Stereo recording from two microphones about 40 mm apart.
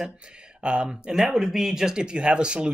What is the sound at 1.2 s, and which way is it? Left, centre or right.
Speech, centre.